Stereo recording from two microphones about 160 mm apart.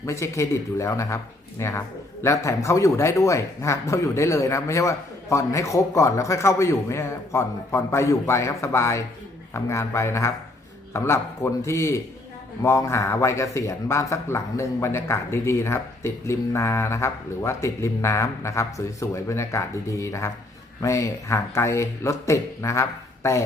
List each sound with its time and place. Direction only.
0.0 s a man's voice: 15° left (ahead or behind)